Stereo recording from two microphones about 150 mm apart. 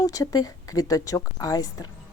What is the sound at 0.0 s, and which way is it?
Speech, 25° left (ahead or behind).